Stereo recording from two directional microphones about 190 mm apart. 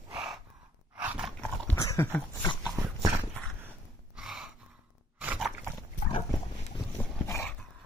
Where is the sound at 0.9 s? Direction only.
5° right (ahead or behind).